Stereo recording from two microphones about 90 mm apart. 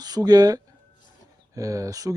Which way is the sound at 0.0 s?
45° right (ahead or behind).